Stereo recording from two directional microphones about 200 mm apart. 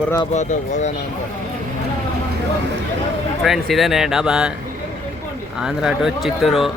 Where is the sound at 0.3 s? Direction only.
35° left (ahead or behind).